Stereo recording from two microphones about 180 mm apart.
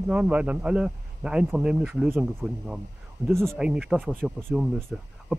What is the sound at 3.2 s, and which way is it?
Speech, centre (ahead or behind).